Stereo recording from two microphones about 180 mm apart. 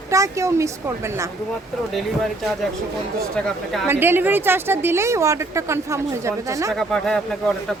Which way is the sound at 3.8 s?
10° right (ahead or behind).